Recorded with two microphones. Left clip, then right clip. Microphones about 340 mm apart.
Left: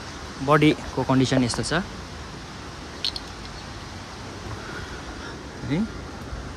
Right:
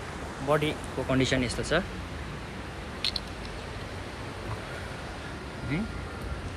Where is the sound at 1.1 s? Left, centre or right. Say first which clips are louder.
Left 4 dB; centre.